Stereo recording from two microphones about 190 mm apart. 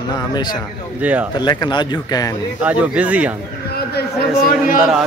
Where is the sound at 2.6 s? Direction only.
5° right (ahead or behind).